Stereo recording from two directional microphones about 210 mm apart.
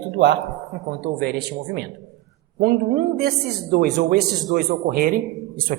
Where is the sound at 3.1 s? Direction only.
45° right (ahead or behind).